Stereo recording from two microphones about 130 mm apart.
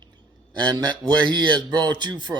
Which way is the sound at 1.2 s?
35° right (ahead or behind).